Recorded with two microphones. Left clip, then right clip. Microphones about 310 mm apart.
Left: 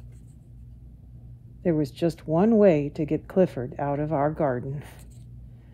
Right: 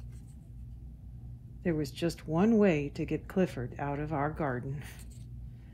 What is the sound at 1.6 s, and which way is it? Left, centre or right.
Speech, left.